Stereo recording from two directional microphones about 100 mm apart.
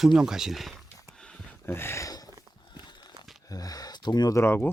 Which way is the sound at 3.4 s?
40° left (ahead or behind).